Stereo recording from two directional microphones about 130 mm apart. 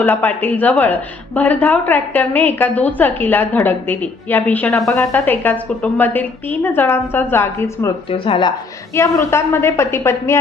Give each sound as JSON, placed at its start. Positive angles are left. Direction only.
{"t": 0.0, "sound": "a woman's voice", "side_deg": 15}
{"t": 8.1, "sound": "speech", "side_deg": 45}
{"t": 9.0, "sound": "a woman's voice", "side_deg": 20}